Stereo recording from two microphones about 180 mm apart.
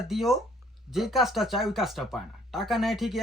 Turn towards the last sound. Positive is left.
turn(degrees=0)  # may be behind; listen again after turning